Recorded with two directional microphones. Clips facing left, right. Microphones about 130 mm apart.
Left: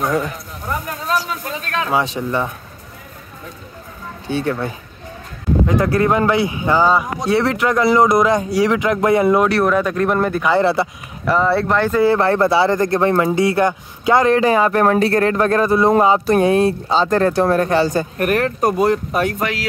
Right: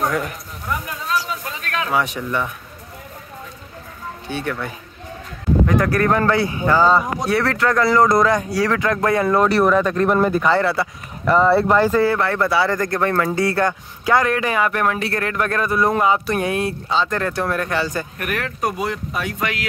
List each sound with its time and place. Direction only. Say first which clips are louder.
0.1 s a sound: left 4 dB; 30° left (ahead or behind)
1.6 s speech: left 2 dB; 30° left (ahead or behind)
4.3 s speech: left 6 dB; 30° left (ahead or behind)
9.4 s speech: even; centre (ahead or behind)
10.6 s speech: left 4 dB; 25° left (ahead or behind)
11.2 s speech: right 1 dB; centre (ahead or behind)
12.0 s speech: left 4 dB; 30° left (ahead or behind); by 19.4 s 45° left (ahead or behind)